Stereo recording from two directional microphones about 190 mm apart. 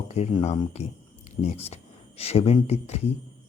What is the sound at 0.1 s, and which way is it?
Speech, 35° left (ahead or behind).